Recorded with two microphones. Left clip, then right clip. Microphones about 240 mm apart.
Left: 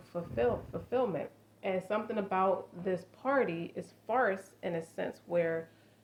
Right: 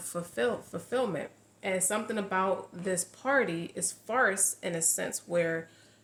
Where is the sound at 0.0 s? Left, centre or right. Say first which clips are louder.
Right 1 dB; right.